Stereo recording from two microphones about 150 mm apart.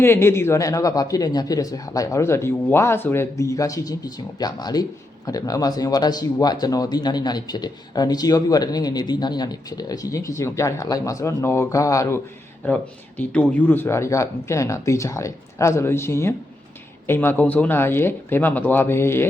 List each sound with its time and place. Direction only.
0.0 s speech: 15° left (ahead or behind)
12.6 s speech: 10° left (ahead or behind)